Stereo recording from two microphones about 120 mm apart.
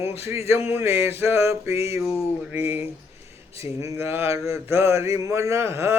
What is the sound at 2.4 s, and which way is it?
Speech, 15° right (ahead or behind).